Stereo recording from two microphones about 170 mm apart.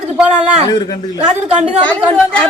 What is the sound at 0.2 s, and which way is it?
Speech, 5° right (ahead or behind).